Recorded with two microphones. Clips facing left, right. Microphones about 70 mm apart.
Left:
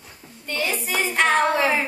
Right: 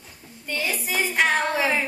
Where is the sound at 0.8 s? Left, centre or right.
Centre.